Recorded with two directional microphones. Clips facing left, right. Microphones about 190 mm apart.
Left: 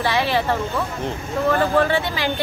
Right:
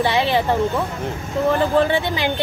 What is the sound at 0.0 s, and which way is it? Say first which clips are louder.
Speech: right 2 dB; 20° right (ahead or behind).